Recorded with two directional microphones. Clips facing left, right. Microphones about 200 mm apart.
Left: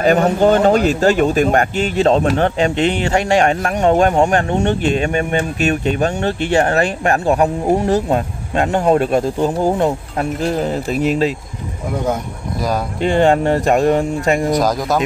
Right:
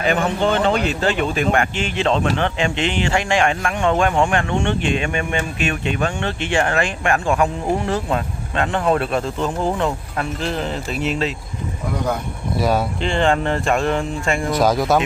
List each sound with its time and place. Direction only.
0.0 s speech: 40° left (ahead or behind)
12.5 s speech: 5° right (ahead or behind)
13.7 s speech: 40° left (ahead or behind)
14.6 s speech: centre (ahead or behind)